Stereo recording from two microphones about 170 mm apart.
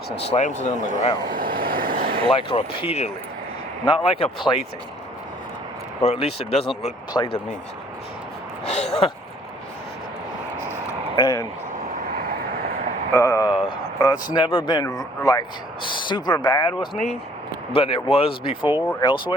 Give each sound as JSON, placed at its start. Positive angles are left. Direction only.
{"t": 0.2, "sound": "speech", "side_deg": 40}
{"t": 1.3, "sound": "vehicle", "side_deg": -60}
{"t": 2.2, "sound": "speech", "side_deg": 30}
{"t": 6.0, "sound": "speech", "side_deg": 35}
{"t": 8.6, "sound": "speech", "side_deg": 40}
{"t": 11.1, "sound": "speech", "side_deg": 25}
{"t": 13.1, "sound": "speech", "side_deg": 15}
{"t": 13.5, "sound": "a sound", "side_deg": 30}
{"t": 14.3, "sound": "speech", "side_deg": 25}